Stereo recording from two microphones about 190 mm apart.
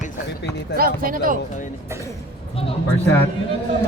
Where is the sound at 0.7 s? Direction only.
50° right (ahead or behind).